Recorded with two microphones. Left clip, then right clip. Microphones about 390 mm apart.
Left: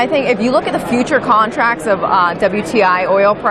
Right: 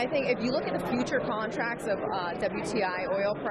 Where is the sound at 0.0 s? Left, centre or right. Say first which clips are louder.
Left 14 dB; left.